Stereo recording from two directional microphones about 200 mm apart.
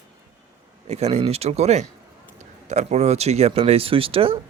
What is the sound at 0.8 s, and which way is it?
Speech, 30° right (ahead or behind).